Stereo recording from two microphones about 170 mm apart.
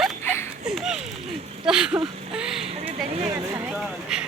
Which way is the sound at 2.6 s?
35° right (ahead or behind).